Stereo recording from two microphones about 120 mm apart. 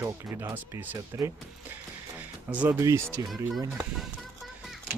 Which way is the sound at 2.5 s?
10° right (ahead or behind).